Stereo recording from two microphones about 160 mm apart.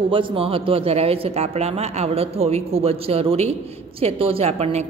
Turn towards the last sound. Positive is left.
turn(degrees=-40)  # may be behind; listen again after turning